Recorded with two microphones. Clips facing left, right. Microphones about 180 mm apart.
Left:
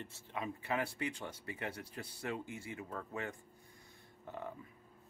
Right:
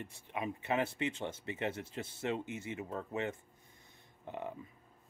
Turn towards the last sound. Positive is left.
turn(degrees=-20)  # may be behind; listen again after turning